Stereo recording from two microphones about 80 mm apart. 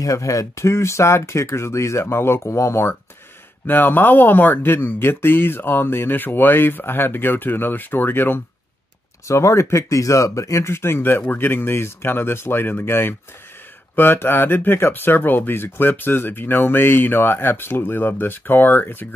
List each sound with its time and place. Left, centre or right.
0.0 s speech: left
9.3 s speech: left